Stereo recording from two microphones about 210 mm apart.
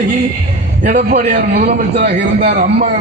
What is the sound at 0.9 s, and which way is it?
A man's voice, 40° right (ahead or behind).